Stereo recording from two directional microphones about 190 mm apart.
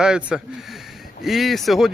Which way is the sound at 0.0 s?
5° right (ahead or behind).